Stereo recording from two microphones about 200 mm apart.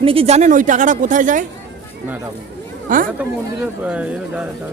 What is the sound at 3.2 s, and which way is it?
Speech, 5° right (ahead or behind).